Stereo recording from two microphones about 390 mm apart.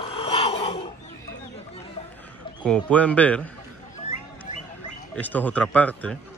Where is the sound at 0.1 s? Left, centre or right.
Centre.